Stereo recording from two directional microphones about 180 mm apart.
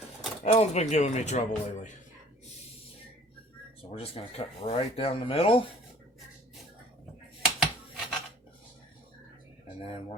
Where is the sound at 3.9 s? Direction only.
30° left (ahead or behind).